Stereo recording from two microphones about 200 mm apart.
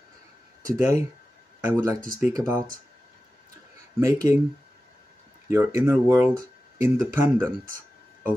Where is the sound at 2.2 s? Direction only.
15° right (ahead or behind).